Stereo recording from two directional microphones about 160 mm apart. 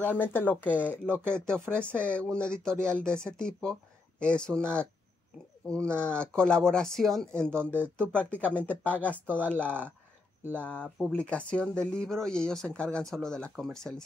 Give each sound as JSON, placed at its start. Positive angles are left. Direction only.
{"t": 0.0, "sound": "speech", "side_deg": 10}
{"t": 5.7, "sound": "speech", "side_deg": 5}
{"t": 7.5, "sound": "speech", "side_deg": -10}
{"t": 8.2, "sound": "speech", "side_deg": 10}
{"t": 9.7, "sound": "speech", "side_deg": -10}
{"t": 10.7, "sound": "speech", "side_deg": 5}